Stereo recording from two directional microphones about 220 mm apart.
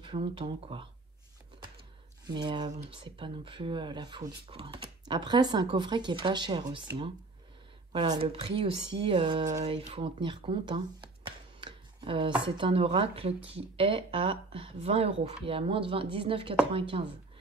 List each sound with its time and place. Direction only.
0.0 s speech: 20° right (ahead or behind)
2.2 s speech: 20° right (ahead or behind)
7.9 s speech: 20° right (ahead or behind)